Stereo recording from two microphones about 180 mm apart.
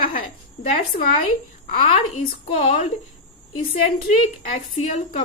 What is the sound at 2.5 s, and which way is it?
Speech, 35° left (ahead or behind).